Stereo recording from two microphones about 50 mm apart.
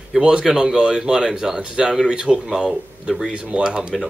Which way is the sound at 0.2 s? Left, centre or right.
Centre.